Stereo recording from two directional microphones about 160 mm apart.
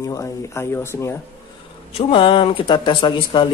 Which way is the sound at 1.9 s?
35° left (ahead or behind).